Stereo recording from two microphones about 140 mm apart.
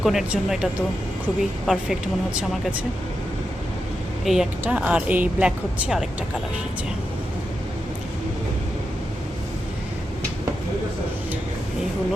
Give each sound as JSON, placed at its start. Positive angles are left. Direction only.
{"t": 0.0, "sound": "speech", "side_deg": -5}
{"t": 4.3, "sound": "speech", "side_deg": 0}